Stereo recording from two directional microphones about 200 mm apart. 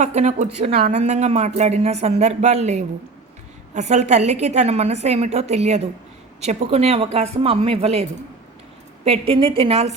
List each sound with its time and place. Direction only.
0.0 s a woman's voice: 35° right (ahead or behind)
9.0 s a woman's voice: 30° right (ahead or behind)